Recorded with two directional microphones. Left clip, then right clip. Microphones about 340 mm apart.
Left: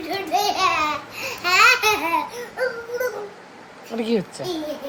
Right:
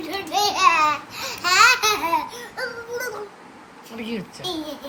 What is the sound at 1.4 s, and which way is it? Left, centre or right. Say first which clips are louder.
Babbling: even; right.